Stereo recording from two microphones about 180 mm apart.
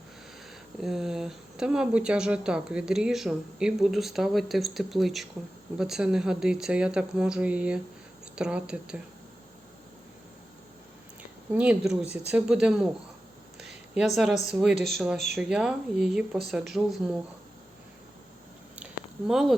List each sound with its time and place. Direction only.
0.8 s speech: centre (ahead or behind)
11.5 s speech: 5° right (ahead or behind)
13.6 s a sound: 5° right (ahead or behind)
14.4 s speech: 5° right (ahead or behind)
19.3 s speech: centre (ahead or behind)